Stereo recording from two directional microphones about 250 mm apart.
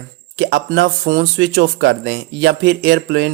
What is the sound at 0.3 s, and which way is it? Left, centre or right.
Speech, right.